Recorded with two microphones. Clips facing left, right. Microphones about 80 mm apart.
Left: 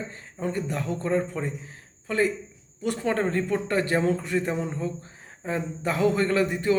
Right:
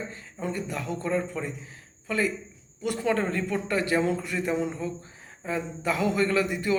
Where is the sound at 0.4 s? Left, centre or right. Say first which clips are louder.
Left 3 dB; left.